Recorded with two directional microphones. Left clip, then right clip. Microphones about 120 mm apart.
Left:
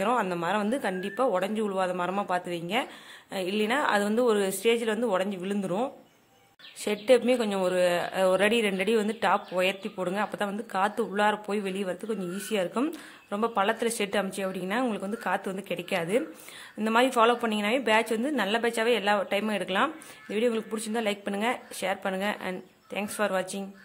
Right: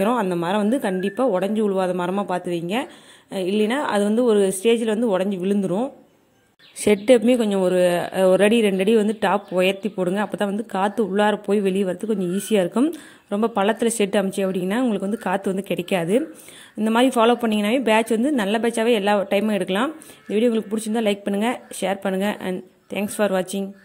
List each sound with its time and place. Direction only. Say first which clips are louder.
0.0 s a woman's voice: right 5 dB; 35° right (ahead or behind)
6.8 s a woman's voice: right 7 dB; 45° right (ahead or behind)
12.8 s a woman's voice: right 9 dB; 35° right (ahead or behind)